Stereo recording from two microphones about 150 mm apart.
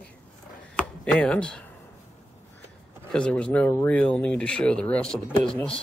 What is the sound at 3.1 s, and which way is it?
Speech, 5° left (ahead or behind).